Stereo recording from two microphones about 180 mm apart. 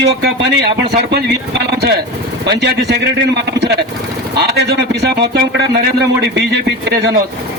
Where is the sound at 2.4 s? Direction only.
75° right (ahead or behind).